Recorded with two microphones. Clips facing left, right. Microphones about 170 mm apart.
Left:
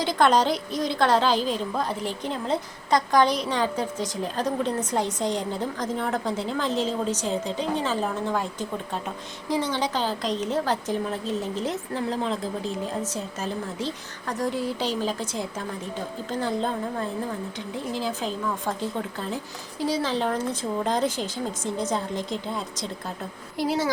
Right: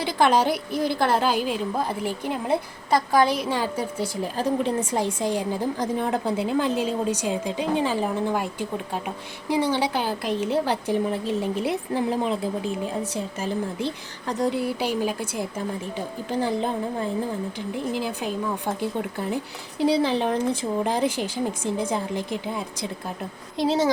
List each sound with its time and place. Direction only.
0.1 s a woman's voice: 10° right (ahead or behind)
23.6 s speech: 20° right (ahead or behind)